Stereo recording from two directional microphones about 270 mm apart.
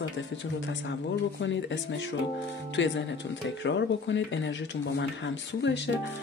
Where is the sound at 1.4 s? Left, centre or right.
Left.